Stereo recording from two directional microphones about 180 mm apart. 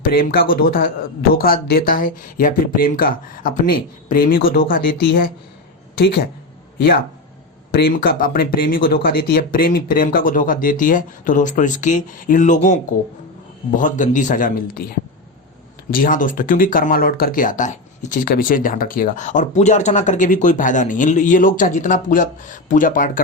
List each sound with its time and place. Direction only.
0.1 s speech: 55° left (ahead or behind)
15.9 s speech: 50° left (ahead or behind)